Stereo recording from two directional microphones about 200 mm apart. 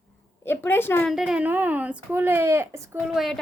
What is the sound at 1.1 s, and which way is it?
Speech, 5° right (ahead or behind).